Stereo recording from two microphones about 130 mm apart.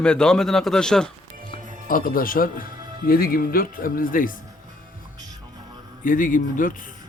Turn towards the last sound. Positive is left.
turn(degrees=90)